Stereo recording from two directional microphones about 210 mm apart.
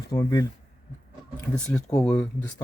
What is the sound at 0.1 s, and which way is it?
Speech, 20° left (ahead or behind).